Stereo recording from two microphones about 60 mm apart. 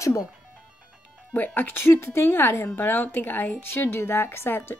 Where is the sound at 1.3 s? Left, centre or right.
Left.